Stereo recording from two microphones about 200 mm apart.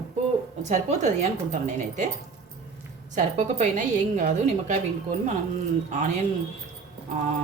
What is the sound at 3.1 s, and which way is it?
A woman's voice, 35° right (ahead or behind).